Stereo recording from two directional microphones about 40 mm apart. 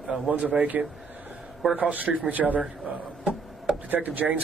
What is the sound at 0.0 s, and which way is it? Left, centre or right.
Speech, right.